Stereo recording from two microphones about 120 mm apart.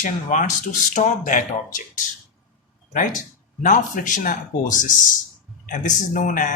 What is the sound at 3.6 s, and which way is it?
Speech, 90° left.